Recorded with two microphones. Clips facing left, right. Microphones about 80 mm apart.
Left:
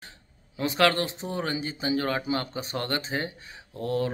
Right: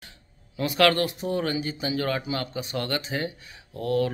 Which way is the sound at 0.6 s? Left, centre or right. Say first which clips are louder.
Right 2 dB; left.